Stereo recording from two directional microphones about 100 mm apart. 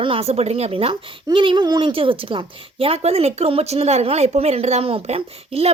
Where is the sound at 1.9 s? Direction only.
65° right (ahead or behind); by 5.7 s 90° right.